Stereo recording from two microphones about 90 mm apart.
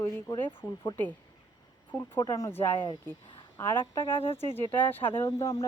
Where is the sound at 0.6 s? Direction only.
25° right (ahead or behind).